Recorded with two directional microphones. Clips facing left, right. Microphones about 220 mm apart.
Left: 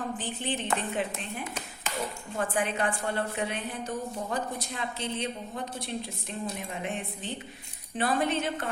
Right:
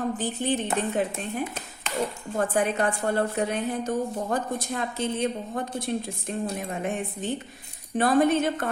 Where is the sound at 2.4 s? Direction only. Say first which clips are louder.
Right 5 dB; 40° right (ahead or behind).